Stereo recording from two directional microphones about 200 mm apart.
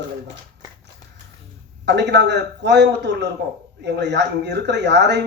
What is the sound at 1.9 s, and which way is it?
A man's voice, 60° right (ahead or behind).